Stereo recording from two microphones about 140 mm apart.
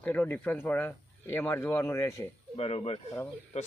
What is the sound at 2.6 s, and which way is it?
Speech, 45° left (ahead or behind).